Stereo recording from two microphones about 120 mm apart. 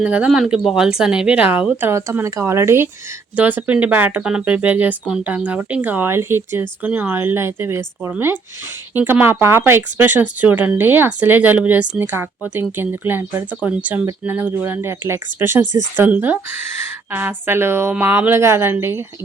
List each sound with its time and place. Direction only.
0.0 s a woman's voice: 10° right (ahead or behind)